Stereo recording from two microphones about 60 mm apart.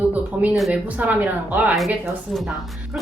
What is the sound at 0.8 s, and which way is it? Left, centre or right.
Speech, right.